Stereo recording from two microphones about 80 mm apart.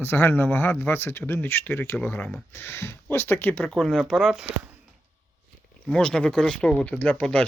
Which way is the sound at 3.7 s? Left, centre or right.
Centre.